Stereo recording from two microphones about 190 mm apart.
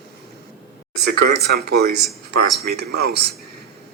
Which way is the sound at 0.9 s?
60° right (ahead or behind).